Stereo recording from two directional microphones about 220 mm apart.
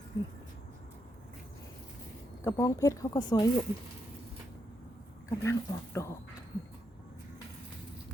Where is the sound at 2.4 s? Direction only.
10° left (ahead or behind).